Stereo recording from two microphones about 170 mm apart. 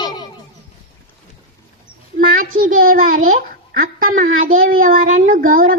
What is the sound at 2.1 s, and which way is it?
A child's voice, 55° right (ahead or behind).